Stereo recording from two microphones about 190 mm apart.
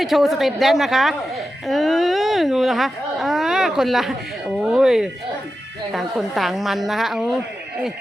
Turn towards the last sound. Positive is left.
turn(degrees=0)  # may be behind; listen again after turning